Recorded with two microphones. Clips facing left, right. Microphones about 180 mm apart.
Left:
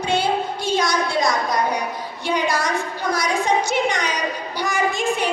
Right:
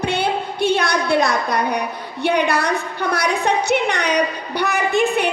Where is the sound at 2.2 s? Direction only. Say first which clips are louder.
Right 4 dB; 60° right (ahead or behind).